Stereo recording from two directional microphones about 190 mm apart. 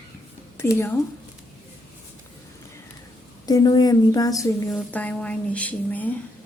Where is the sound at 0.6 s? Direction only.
15° left (ahead or behind).